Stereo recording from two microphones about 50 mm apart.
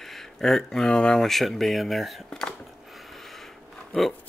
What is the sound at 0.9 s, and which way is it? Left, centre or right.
Speech, centre.